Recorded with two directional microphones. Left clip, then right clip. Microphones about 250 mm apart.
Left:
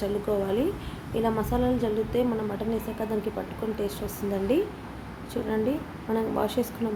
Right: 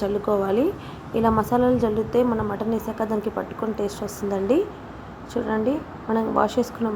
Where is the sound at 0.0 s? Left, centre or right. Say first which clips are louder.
Right 5 dB; centre.